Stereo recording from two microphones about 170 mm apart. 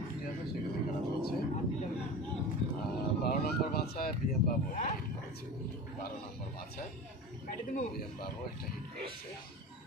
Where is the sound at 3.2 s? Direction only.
65° left (ahead or behind).